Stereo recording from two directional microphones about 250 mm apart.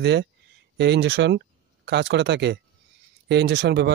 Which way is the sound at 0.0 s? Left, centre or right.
Right.